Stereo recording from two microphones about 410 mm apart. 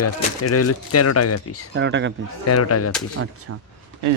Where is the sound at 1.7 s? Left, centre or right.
Right.